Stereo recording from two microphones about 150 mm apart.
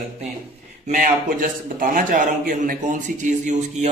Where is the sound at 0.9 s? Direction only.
65° right (ahead or behind).